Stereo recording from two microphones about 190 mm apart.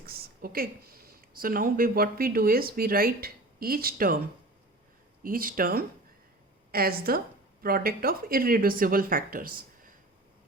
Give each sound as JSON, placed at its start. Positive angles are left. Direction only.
{"t": 0.0, "sound": "speech", "side_deg": -55}
{"t": 5.2, "sound": "speech", "side_deg": -50}